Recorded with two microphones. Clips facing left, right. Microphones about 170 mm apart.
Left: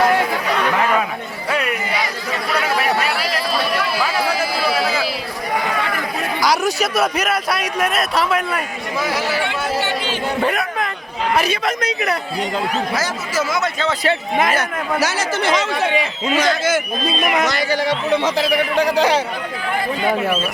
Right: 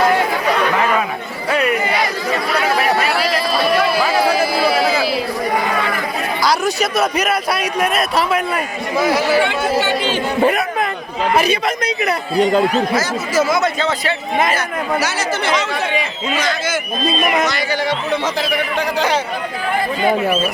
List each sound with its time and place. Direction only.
3.8 s a sound: 50° right (ahead or behind)
6.4 s a man's voice: 15° left (ahead or behind)
9.4 s chatter: 90° right
10.4 s a sound: 5° right (ahead or behind)
11.3 s a man's voice: centre (ahead or behind)
16.4 s speech: 45° left (ahead or behind)
17.1 s speech: 5° left (ahead or behind)
17.5 s speech: 40° left (ahead or behind)
18.1 s speech: 30° left (ahead or behind)
20.1 s speech: 5° right (ahead or behind)